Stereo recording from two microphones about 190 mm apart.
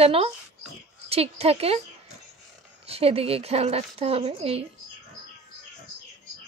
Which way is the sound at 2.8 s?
30° right (ahead or behind).